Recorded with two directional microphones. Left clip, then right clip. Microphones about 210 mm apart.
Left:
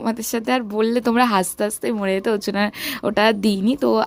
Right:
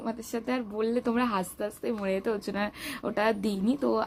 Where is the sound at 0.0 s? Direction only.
50° left (ahead or behind).